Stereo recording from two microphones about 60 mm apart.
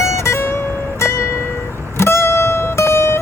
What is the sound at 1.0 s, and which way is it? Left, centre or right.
Zither, left.